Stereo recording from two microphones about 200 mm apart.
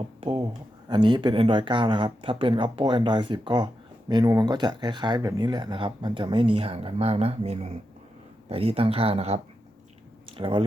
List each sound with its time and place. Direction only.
0.2 s speech: 20° right (ahead or behind)